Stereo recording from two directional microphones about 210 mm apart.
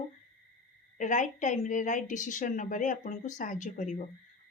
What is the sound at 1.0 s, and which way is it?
A woman's voice, 35° left (ahead or behind).